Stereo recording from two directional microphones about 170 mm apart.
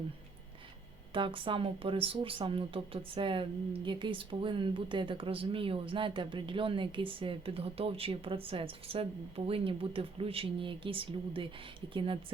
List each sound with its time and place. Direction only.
1.1 s speech: 30° right (ahead or behind)